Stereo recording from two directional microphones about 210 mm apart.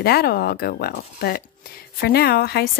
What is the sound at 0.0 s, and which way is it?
Speech, 45° left (ahead or behind).